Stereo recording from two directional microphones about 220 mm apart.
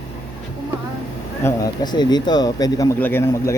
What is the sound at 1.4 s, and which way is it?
Speech, 15° left (ahead or behind).